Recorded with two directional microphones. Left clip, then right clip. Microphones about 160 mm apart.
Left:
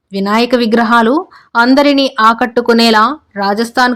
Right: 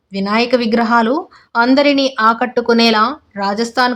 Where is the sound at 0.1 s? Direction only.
20° left (ahead or behind).